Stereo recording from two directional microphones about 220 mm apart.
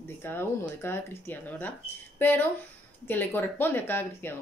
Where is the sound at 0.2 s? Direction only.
10° left (ahead or behind).